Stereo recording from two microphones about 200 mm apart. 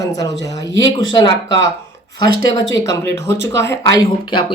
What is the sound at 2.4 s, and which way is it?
Speech, 20° left (ahead or behind).